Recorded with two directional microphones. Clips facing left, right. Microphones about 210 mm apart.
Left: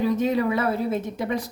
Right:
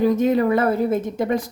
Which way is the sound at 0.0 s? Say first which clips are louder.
Right 4 dB; 50° right (ahead or behind).